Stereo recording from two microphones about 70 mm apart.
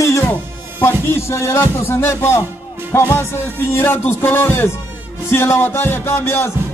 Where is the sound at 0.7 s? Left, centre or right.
Left.